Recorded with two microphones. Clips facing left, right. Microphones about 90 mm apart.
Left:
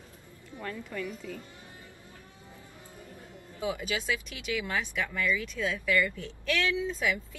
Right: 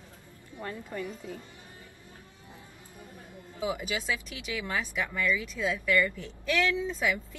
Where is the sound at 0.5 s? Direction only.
25° right (ahead or behind).